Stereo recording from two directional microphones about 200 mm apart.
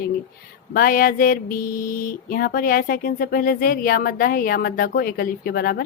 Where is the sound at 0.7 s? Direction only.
45° left (ahead or behind).